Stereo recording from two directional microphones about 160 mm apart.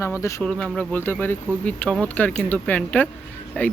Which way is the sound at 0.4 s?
5° left (ahead or behind).